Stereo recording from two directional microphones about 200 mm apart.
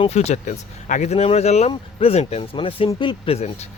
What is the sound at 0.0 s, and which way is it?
Speech, 30° left (ahead or behind).